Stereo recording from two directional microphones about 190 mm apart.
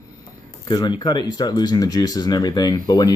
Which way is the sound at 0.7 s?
25° left (ahead or behind).